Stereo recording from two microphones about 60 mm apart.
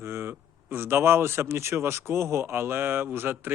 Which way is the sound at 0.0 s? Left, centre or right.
Right.